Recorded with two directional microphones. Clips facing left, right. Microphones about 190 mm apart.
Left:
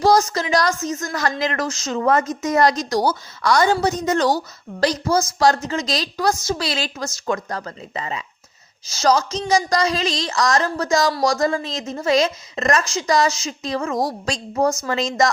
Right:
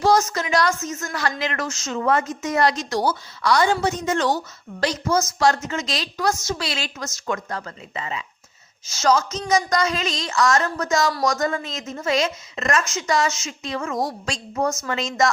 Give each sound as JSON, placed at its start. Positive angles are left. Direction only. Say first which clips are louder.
{"t": 0.0, "sound": "a woman's voice", "louder": "left 2 dB", "side_deg": 35}